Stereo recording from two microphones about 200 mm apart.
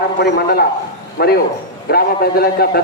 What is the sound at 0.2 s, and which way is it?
A man's voice, 50° left (ahead or behind).